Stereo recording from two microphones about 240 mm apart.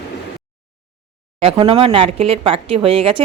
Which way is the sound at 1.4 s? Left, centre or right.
Right.